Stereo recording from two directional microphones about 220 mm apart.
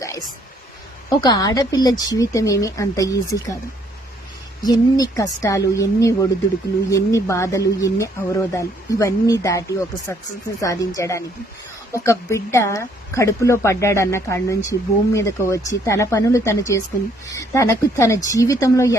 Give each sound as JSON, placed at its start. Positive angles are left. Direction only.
{"t": 0.0, "sound": "a sound", "side_deg": 15}
{"t": 1.2, "sound": "speech", "side_deg": 15}
{"t": 4.6, "sound": "speech", "side_deg": 15}